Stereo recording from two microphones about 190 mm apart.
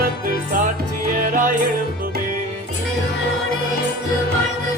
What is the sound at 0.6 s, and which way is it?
Music, 45° right (ahead or behind).